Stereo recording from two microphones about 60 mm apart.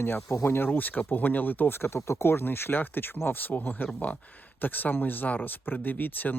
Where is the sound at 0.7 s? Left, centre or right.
Left.